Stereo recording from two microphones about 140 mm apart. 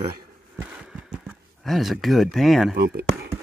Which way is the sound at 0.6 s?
10° right (ahead or behind).